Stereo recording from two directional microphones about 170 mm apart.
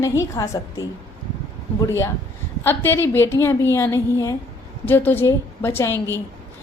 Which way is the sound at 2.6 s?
10° left (ahead or behind).